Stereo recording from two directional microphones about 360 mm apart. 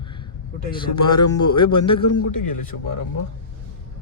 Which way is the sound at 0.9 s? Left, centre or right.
Left.